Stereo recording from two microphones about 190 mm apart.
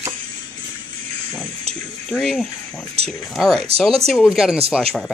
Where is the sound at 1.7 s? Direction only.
30° right (ahead or behind).